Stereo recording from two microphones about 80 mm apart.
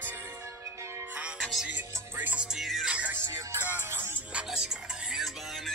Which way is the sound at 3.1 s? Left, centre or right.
Right.